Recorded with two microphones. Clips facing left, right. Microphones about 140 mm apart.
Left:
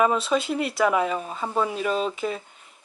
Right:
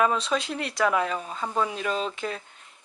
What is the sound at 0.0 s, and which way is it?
Speech, 5° left (ahead or behind).